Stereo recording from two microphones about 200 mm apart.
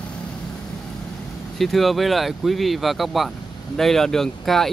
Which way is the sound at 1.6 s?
Centre (ahead or behind).